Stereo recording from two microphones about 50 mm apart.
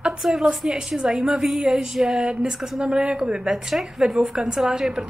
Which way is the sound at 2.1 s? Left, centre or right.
Centre.